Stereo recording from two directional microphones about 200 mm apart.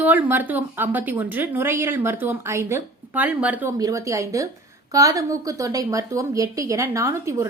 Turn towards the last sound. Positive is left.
turn(degrees=-15)  # may be behind; listen again after turning